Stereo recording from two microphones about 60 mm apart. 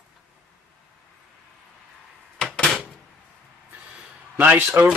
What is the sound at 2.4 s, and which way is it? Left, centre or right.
Door, centre.